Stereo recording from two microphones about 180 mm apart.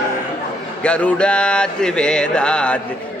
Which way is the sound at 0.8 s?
5° left (ahead or behind).